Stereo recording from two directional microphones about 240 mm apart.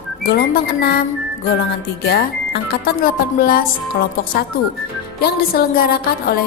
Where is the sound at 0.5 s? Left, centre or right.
Left.